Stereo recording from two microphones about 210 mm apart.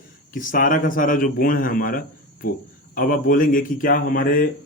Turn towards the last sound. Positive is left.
turn(degrees=45)  # may be behind; listen again after turning